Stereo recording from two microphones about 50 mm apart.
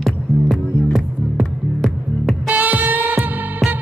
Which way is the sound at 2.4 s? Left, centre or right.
Right.